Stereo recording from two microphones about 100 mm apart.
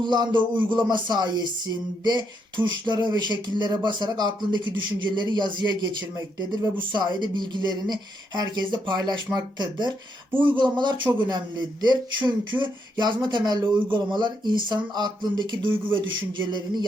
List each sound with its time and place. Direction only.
0.0 s speech: 50° right (ahead or behind)